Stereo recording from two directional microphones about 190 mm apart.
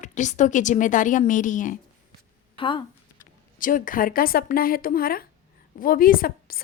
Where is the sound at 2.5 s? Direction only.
25° left (ahead or behind).